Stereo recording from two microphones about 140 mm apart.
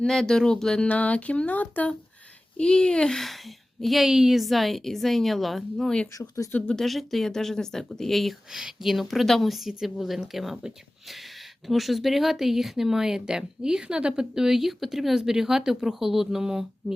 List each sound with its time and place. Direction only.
0.0 s speech: 5° left (ahead or behind)
6.1 s speech: 25° left (ahead or behind)
6.6 s speech: 5° left (ahead or behind)
11.7 s speech: centre (ahead or behind)